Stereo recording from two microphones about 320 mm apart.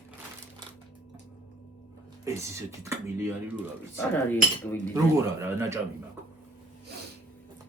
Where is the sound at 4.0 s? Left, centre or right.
Centre.